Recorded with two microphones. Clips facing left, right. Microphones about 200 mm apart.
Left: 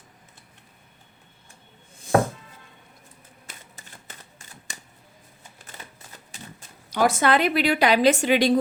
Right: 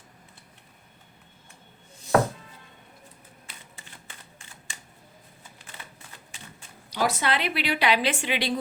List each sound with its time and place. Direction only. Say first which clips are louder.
2.0 s chopping: left 1 dB; 50° left (ahead or behind)
3.4 s a sound: left 3 dB; 40° left (ahead or behind)
5.7 s typewriter: left 2 dB; 45° left (ahead or behind)
6.9 s a woman's voice: left 6 dB; 50° left (ahead or behind)